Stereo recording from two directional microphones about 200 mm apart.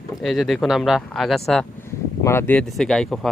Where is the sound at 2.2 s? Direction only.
10° left (ahead or behind).